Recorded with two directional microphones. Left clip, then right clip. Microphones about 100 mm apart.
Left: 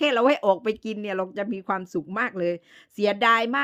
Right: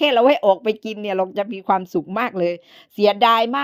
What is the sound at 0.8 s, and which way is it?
Speech, 10° right (ahead or behind).